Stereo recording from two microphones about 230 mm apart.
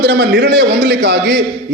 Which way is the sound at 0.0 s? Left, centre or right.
Right.